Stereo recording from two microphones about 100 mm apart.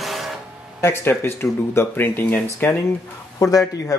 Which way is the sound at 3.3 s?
35° left (ahead or behind).